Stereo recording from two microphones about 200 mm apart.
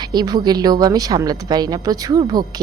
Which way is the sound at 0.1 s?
20° right (ahead or behind).